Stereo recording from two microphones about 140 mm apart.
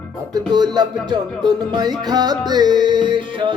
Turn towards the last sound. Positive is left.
turn(degrees=-35)  # may be behind; listen again after turning